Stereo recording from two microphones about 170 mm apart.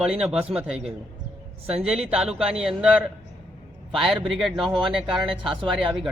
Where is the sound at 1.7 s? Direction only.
5° right (ahead or behind).